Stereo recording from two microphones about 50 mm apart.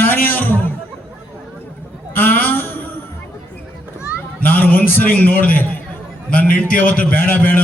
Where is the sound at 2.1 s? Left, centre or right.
Left.